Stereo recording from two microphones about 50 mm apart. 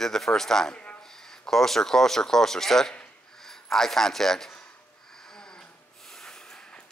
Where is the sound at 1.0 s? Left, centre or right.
Centre.